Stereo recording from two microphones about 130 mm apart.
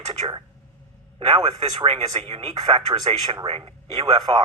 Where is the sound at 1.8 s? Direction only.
50° right (ahead or behind).